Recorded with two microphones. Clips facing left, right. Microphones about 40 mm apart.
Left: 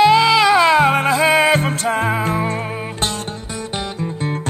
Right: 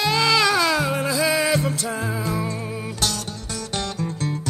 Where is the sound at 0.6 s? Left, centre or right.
Left.